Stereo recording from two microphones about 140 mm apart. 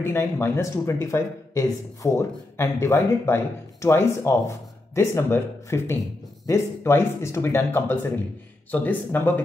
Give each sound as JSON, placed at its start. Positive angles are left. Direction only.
{"t": 0.0, "sound": "speech", "side_deg": 15}